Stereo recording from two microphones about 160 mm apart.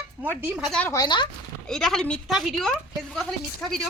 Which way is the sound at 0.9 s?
25° left (ahead or behind).